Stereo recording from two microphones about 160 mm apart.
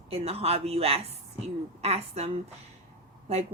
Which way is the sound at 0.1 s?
40° right (ahead or behind).